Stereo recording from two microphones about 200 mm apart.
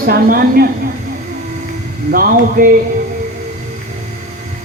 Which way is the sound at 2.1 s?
45° right (ahead or behind).